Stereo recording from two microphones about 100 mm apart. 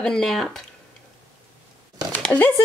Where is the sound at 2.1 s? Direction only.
15° left (ahead or behind).